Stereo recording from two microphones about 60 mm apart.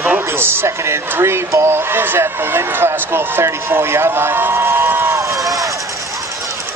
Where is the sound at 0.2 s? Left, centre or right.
Right.